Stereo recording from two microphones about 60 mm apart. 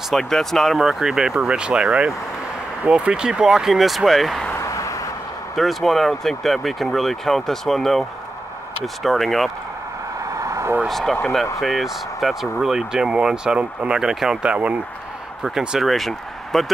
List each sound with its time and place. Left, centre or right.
0.1 s speech: centre
4.6 s a sound: left
5.6 s speech: centre
10.3 s vehicle: right
10.9 s speech: centre; by 14.8 s right
15.8 s speech: centre